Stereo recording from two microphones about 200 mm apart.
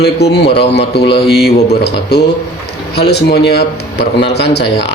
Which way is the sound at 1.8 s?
55° left (ahead or behind).